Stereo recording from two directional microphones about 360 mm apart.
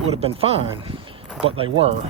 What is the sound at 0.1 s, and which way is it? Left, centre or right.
Speech, centre.